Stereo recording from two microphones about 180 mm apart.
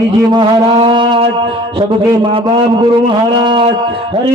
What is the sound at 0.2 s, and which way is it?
Shofar, 25° right (ahead or behind).